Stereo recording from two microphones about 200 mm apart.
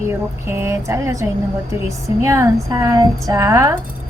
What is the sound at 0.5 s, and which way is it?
A woman's voice, 15° right (ahead or behind).